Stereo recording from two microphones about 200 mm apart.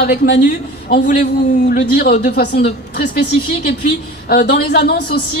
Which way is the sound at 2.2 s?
55° left (ahead or behind).